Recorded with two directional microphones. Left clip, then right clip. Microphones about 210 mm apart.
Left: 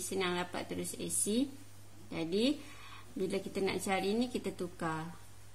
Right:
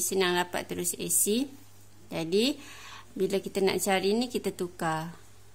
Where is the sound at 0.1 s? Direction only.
45° right (ahead or behind).